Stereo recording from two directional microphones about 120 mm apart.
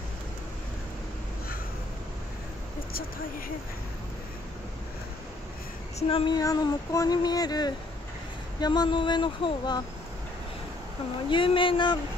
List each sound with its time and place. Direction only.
5.9 s speech: 50° left (ahead or behind)
6.3 s speech: 30° left (ahead or behind)
11.2 s speech: 45° left (ahead or behind)